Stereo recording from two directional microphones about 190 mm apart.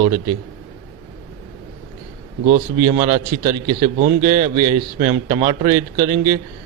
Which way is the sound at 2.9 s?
25° right (ahead or behind).